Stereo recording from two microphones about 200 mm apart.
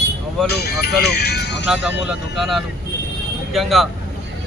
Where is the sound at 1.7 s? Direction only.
5° right (ahead or behind).